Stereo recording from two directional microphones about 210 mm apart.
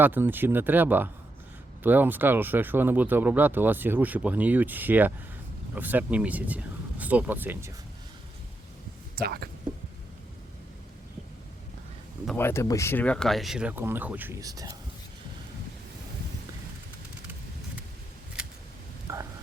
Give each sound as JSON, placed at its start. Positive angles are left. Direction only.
{"t": 0.0, "sound": "speech", "side_deg": -10}
{"t": 9.1, "sound": "speech", "side_deg": -45}
{"t": 12.4, "sound": "speech", "side_deg": 10}
{"t": 19.0, "sound": "a sound", "side_deg": -15}